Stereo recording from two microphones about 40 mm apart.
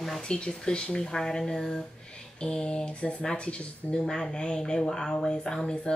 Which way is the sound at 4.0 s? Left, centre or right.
Centre.